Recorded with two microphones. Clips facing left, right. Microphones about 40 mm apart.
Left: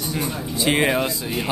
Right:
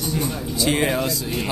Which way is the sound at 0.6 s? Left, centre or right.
Left.